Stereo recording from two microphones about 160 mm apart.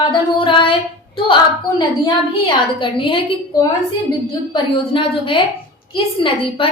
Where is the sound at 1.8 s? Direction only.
30° left (ahead or behind).